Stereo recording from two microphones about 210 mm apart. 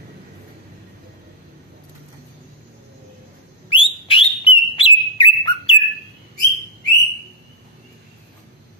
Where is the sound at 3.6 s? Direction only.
25° left (ahead or behind).